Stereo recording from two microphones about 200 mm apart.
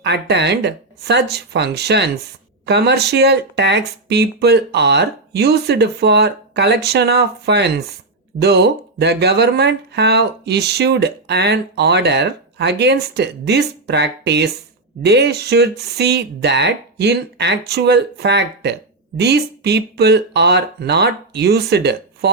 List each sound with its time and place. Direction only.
0.0 s speech: 60° right (ahead or behind)